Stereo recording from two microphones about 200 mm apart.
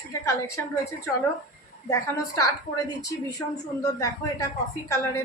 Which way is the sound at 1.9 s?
15° left (ahead or behind).